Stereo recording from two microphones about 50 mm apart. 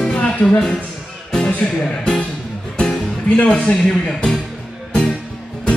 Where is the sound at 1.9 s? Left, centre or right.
Centre.